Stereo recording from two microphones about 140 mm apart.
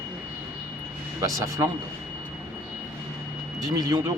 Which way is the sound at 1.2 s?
25° right (ahead or behind).